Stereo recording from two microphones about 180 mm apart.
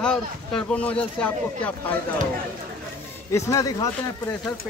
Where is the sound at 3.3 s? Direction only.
20° left (ahead or behind).